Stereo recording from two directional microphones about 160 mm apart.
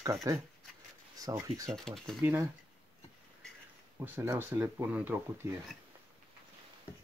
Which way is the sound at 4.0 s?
15° right (ahead or behind).